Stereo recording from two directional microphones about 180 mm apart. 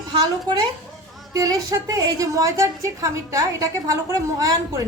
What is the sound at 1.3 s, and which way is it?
A woman's voice, 20° right (ahead or behind).